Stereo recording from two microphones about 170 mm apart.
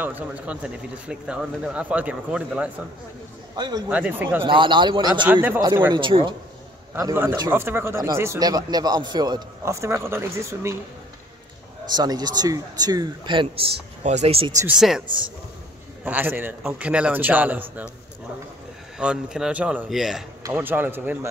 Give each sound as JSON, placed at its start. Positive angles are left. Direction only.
{"t": 0.0, "sound": "speech", "side_deg": -10}
{"t": 3.5, "sound": "a man's voice", "side_deg": -25}
{"t": 3.9, "sound": "speech", "side_deg": -10}
{"t": 4.5, "sound": "a man's voice", "side_deg": -30}
{"t": 5.2, "sound": "speech", "side_deg": -10}
{"t": 5.9, "sound": "a man's voice", "side_deg": -30}
{"t": 7.0, "sound": "speech", "side_deg": -15}
{"t": 11.9, "sound": "a man's voice", "side_deg": -25}
{"t": 14.7, "sound": "a man's voice", "side_deg": -5}
{"t": 18.9, "sound": "a man's voice", "side_deg": -5}